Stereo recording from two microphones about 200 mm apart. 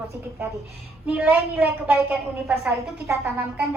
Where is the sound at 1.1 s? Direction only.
5° right (ahead or behind).